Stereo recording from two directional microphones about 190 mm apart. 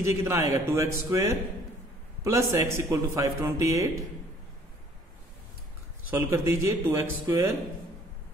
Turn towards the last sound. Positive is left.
turn(degrees=-15)  # may be behind; listen again after turning